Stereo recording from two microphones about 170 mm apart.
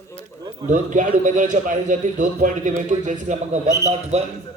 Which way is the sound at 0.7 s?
50° right (ahead or behind).